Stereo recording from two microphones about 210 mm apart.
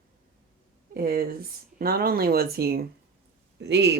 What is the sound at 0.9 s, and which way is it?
Speech, 45° right (ahead or behind).